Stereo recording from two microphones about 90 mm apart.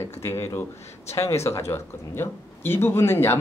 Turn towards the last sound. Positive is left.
turn(degrees=25)  # may be behind; listen again after turning